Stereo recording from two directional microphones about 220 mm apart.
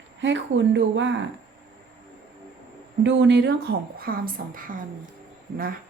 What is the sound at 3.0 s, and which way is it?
Speech, 55° right (ahead or behind).